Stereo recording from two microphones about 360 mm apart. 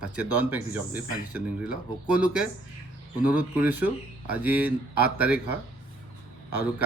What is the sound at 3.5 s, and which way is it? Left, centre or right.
Speech, centre.